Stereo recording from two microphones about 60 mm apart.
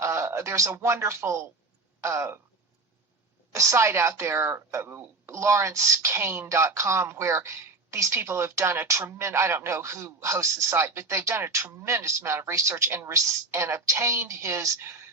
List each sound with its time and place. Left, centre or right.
0.0 s a sound: right
0.9 s a woman's voice: right
3.5 s a woman's voice: right